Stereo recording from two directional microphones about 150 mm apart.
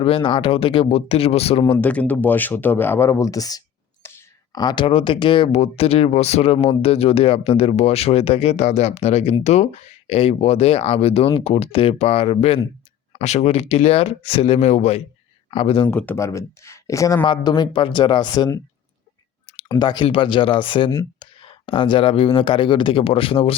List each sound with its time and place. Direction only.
0.0 s speech: 35° left (ahead or behind)
1.8 s speech: 10° left (ahead or behind)
4.0 s a sound: 15° left (ahead or behind)
4.6 s speech: 35° left (ahead or behind); by 15.0 s 50° left (ahead or behind)
15.4 s speech: 40° left (ahead or behind)
15.9 s speech: 15° left (ahead or behind); by 23.6 s 40° left (ahead or behind)